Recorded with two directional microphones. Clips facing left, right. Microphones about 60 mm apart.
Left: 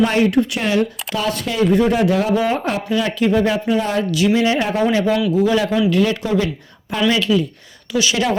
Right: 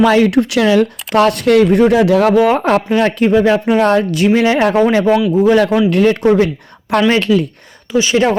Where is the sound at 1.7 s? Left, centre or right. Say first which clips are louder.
Right 5 dB; right.